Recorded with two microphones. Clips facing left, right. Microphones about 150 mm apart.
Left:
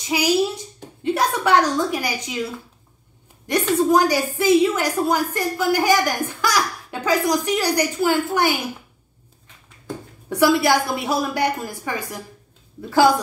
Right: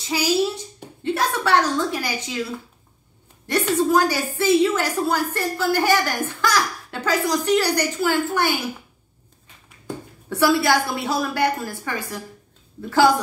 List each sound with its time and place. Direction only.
0.1 s a woman's voice: 15° left (ahead or behind)
3.4 s a woman's voice: 15° left (ahead or behind)
10.3 s a woman's voice: 15° left (ahead or behind)